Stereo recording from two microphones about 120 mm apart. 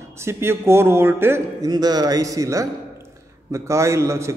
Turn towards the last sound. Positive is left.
turn(degrees=-25)  # may be behind; listen again after turning